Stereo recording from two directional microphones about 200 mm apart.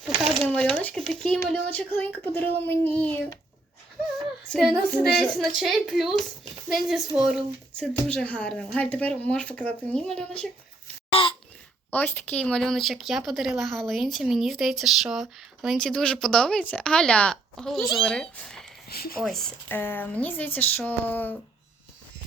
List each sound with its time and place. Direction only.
0.3 s a sound: 5° left (ahead or behind)
1.5 s speech: 5° left (ahead or behind)
4.4 s speech: 5° left (ahead or behind)
11.1 s a sound: 25° left (ahead or behind)
11.9 s speech: 10° left (ahead or behind)
18.9 s speech: 50° left (ahead or behind)
19.2 s speech: centre (ahead or behind)